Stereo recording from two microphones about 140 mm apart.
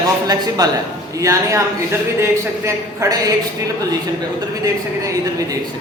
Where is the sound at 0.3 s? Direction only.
30° right (ahead or behind).